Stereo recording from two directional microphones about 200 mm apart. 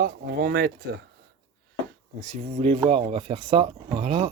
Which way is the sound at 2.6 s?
25° right (ahead or behind).